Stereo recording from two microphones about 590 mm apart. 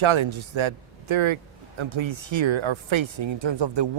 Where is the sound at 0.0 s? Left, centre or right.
Right.